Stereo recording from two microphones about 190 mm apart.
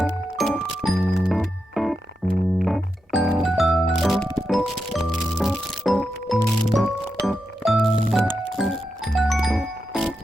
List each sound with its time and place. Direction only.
0.0 s music: centre (ahead or behind)